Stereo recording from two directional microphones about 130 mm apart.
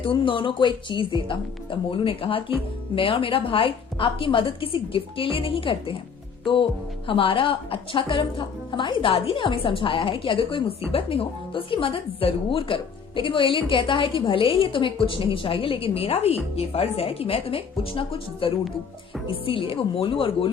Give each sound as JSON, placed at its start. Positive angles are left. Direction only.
{"t": 0.0, "sound": "a woman's voice", "side_deg": 40}
{"t": 7.1, "sound": "a woman's voice", "side_deg": 40}